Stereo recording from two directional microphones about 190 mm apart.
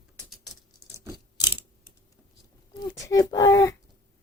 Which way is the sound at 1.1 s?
20° left (ahead or behind).